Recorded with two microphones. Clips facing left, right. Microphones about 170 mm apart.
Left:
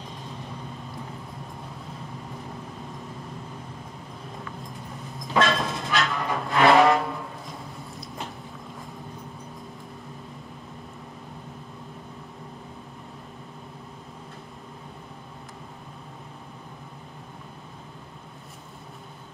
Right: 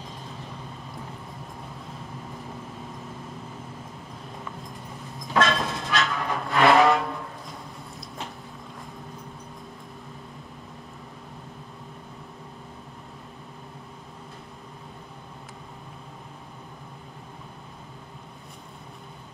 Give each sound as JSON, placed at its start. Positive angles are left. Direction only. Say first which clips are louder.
{"t": 5.3, "sound": "vehicle", "louder": "even", "side_deg": 0}